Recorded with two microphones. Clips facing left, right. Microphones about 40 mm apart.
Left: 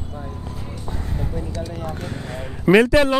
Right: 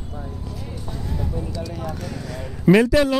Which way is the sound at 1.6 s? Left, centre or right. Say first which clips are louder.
Left 1 dB; left.